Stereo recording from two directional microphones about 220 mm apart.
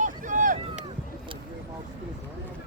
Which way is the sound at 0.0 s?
35° right (ahead or behind).